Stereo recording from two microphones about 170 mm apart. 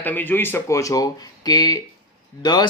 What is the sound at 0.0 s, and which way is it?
Speech, 10° left (ahead or behind).